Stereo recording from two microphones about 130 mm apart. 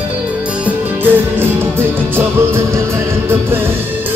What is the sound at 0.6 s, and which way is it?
Music, 15° right (ahead or behind).